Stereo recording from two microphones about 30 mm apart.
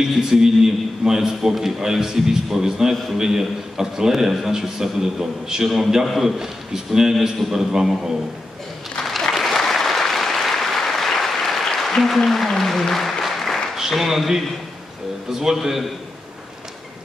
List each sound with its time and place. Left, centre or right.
0.0 s a man's voice: centre
7.2 s a man's voice: centre
7.5 s a man's voice: centre
9.3 s applause: centre
12.2 s speech: centre
13.7 s a man's voice: centre